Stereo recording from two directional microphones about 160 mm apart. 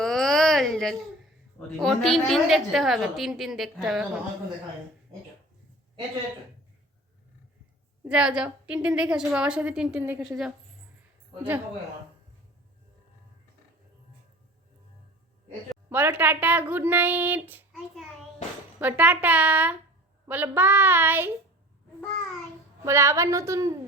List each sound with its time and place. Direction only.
0.0 s a sound: centre (ahead or behind)
1.5 s a woman's voice: centre (ahead or behind)
8.0 s a woman's voice: 5° right (ahead or behind)
15.9 s a woman's voice: 10° right (ahead or behind)
18.8 s a woman's voice: 10° right (ahead or behind)
22.8 s a woman's voice: 15° right (ahead or behind)